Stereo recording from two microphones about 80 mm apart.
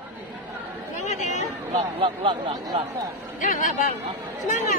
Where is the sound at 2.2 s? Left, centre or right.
Right.